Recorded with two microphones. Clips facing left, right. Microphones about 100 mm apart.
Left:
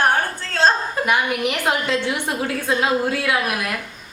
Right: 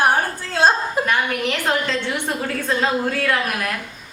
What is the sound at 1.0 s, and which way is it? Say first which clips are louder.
A woman's voice: left 1 dB; 15° left (ahead or behind).